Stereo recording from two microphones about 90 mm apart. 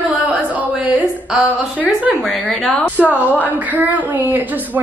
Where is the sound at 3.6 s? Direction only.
20° right (ahead or behind).